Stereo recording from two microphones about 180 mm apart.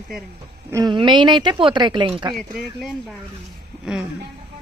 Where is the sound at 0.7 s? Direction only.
20° right (ahead or behind).